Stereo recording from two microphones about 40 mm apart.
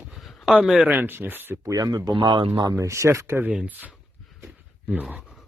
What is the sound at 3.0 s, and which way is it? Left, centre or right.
Speech, right.